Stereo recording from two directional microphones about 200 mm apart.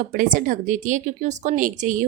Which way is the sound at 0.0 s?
40° right (ahead or behind).